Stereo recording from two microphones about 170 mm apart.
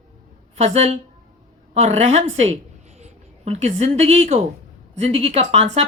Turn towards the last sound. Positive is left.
turn(degrees=-40)  # may be behind; listen again after turning